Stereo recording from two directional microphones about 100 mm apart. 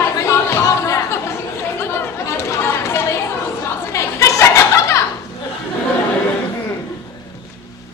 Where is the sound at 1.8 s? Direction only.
25° left (ahead or behind).